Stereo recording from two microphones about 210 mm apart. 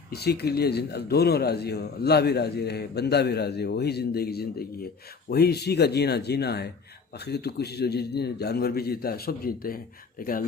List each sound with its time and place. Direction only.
0.1 s a man's voice: 50° left (ahead or behind)